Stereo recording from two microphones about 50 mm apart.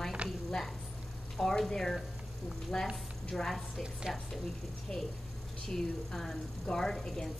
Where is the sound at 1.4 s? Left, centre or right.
Centre.